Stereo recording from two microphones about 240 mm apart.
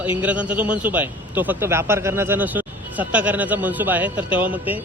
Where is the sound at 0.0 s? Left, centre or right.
Centre.